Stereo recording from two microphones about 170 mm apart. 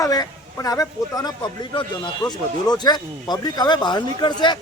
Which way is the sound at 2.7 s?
25° left (ahead or behind).